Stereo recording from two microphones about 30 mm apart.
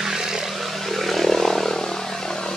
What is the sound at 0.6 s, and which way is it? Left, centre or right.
Vehicle, centre.